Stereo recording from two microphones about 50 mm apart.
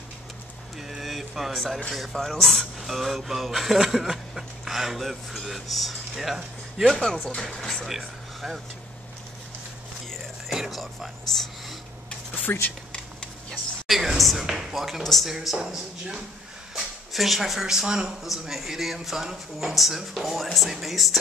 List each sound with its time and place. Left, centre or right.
0.7 s a sound: centre
1.9 s speech: centre
6.9 s speech: centre
7.8 s speech: centre
10.5 s whispering: centre
12.4 s speech: left
12.9 s a sound: centre
13.8 s speech: centre